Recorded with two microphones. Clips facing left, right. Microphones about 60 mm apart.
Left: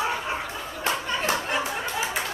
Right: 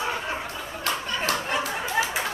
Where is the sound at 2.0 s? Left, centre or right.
Right.